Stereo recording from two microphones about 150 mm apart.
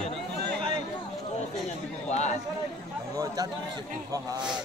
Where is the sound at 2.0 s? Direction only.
50° left (ahead or behind).